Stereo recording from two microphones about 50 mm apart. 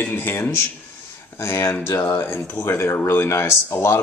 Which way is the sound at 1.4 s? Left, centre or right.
Left.